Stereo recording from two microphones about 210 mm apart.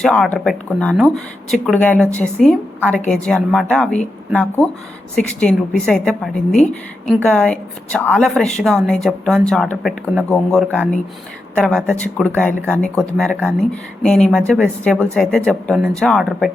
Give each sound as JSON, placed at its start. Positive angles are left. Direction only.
{"t": 0.0, "sound": "speech", "side_deg": 5}